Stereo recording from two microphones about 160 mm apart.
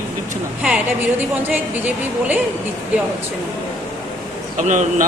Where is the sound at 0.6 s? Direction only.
10° right (ahead or behind).